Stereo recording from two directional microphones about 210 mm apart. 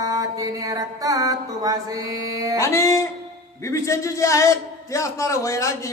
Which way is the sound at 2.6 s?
15° left (ahead or behind).